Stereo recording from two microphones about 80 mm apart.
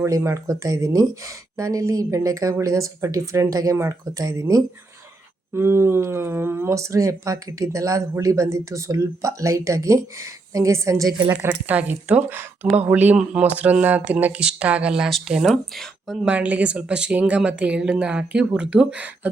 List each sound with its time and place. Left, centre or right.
0.0 s speech: right
5.5 s speech: right
11.3 s speech: right; by 16.1 s centre
16.2 s speech: centre